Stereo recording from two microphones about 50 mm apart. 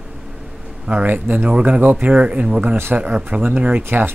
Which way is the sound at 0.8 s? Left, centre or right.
Right.